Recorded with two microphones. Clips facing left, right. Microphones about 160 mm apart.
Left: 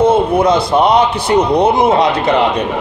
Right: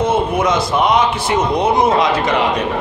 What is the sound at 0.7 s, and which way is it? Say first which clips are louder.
Speech: left 4 dB; 30° left (ahead or behind).